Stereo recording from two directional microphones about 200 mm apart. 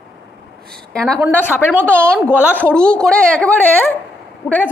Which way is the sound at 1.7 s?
10° right (ahead or behind).